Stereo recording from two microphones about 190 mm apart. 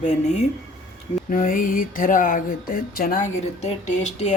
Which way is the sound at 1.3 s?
45° left (ahead or behind).